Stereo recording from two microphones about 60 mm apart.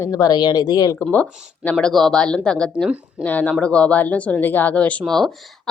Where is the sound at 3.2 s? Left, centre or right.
Left.